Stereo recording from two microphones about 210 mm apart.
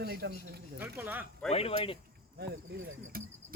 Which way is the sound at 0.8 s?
10° right (ahead or behind).